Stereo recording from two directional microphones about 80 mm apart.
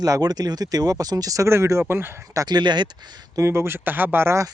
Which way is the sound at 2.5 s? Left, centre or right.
Right.